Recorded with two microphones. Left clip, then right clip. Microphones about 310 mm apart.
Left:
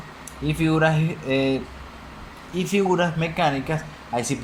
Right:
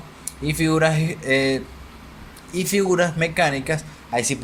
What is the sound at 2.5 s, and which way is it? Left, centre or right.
Speech, right.